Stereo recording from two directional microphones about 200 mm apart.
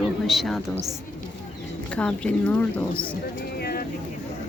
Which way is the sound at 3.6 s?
50° left (ahead or behind).